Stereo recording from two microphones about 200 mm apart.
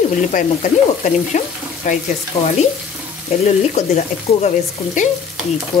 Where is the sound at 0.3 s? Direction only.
40° left (ahead or behind).